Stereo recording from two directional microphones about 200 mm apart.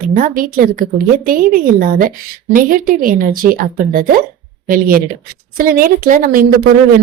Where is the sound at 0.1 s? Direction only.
45° right (ahead or behind).